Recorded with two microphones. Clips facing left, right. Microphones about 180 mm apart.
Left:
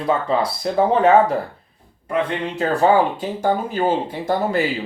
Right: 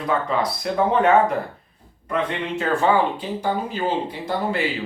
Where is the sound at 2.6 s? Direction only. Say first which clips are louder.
Left 3 dB; 45° left (ahead or behind).